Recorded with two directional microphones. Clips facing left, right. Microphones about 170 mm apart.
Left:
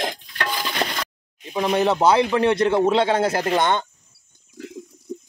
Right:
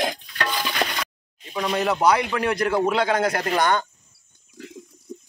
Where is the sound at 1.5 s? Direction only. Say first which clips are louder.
Left 4 dB; 25° left (ahead or behind).